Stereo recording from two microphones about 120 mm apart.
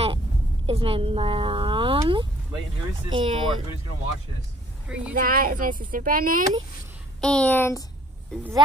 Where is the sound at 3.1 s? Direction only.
40° right (ahead or behind).